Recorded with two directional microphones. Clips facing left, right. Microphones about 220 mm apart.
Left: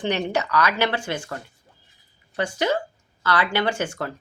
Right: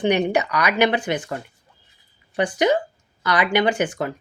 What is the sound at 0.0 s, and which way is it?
A woman's voice, 15° right (ahead or behind).